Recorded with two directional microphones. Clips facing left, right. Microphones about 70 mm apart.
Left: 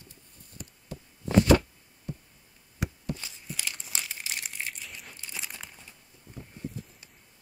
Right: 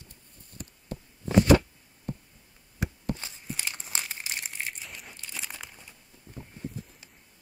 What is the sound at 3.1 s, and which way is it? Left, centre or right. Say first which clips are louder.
Crumpling: right 3 dB; right.